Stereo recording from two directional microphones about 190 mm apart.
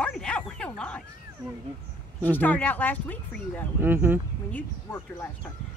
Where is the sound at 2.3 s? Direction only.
10° left (ahead or behind).